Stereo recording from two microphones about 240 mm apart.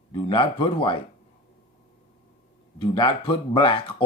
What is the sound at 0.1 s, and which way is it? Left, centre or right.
Speech, left.